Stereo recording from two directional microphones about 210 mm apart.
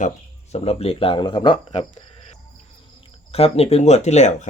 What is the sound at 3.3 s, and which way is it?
Speech, 30° left (ahead or behind).